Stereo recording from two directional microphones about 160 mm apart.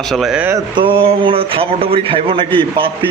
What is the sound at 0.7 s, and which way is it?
A man's voice, 35° right (ahead or behind).